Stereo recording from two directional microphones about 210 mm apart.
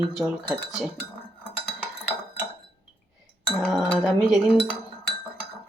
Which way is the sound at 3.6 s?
Centre (ahead or behind).